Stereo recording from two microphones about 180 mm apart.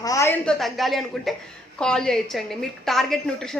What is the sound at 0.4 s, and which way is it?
A woman's voice, centre (ahead or behind).